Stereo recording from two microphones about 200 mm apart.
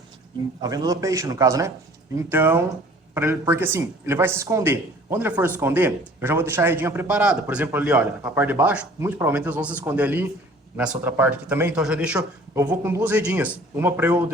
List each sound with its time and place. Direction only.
0.6 s a man's voice: 20° right (ahead or behind)